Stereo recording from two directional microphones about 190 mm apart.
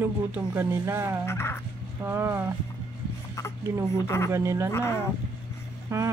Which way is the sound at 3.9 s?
15° left (ahead or behind).